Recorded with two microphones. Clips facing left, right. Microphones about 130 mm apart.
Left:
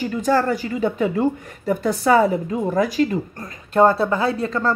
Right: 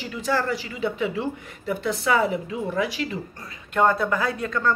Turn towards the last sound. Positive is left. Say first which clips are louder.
# left 4 dB
turn(degrees=35)  # may be behind; listen again after turning